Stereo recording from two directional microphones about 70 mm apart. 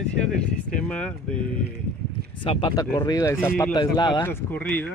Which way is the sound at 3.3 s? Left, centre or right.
Left.